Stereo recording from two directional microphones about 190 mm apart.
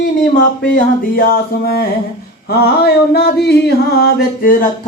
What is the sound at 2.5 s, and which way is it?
Music, 55° left (ahead or behind).